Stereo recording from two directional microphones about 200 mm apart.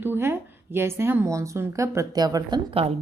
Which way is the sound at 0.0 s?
10° right (ahead or behind).